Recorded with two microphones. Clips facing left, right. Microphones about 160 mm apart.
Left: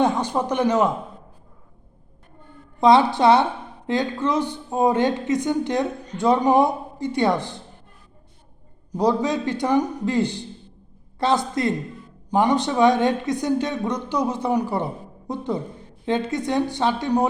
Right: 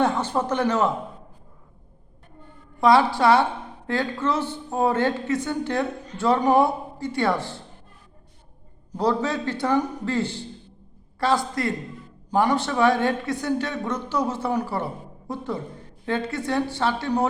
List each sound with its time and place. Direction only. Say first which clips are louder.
0.0 s a woman's voice: left 2 dB; 15° left (ahead or behind)
2.8 s a woman's voice: left 2 dB; 20° left (ahead or behind)
9.0 s a woman's voice: left 3 dB; 15° left (ahead or behind)